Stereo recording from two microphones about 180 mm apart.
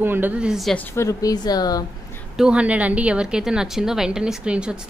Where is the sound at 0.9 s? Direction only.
20° left (ahead or behind).